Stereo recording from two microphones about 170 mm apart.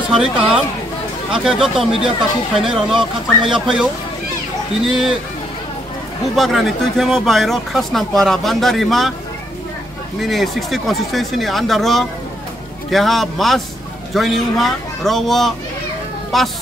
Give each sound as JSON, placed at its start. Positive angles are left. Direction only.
{"t": 1.3, "sound": "speech", "side_deg": 0}
{"t": 6.3, "sound": "speech", "side_deg": 0}
{"t": 10.2, "sound": "speech", "side_deg": 0}